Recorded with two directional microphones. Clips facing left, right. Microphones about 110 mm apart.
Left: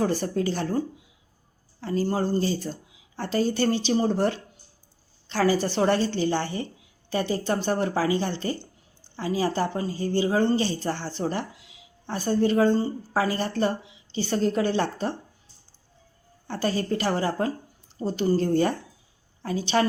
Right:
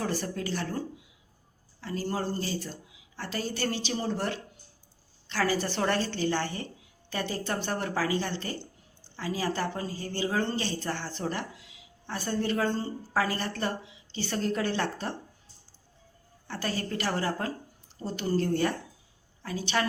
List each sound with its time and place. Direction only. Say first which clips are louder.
0.0 s speech: left 7 dB; 25° left (ahead or behind)
1.8 s a woman's voice: left 6 dB; 30° left (ahead or behind)
16.5 s speech: left 7 dB; 25° left (ahead or behind)